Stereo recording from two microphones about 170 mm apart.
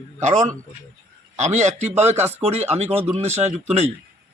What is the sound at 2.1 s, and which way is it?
Speech, 10° right (ahead or behind).